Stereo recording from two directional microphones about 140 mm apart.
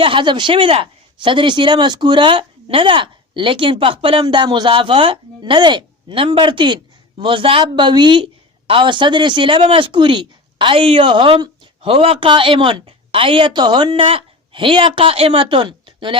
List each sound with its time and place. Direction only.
0.0 s speech: 40° right (ahead or behind)